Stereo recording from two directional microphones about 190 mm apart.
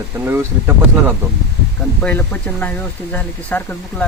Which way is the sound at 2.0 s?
10° left (ahead or behind).